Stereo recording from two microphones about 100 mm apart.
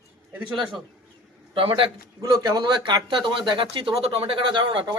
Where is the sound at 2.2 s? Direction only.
40° right (ahead or behind).